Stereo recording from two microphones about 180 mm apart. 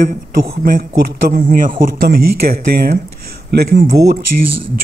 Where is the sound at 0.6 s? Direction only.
55° right (ahead or behind).